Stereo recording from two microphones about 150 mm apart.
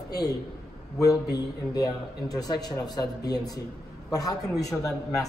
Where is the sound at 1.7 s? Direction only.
25° left (ahead or behind).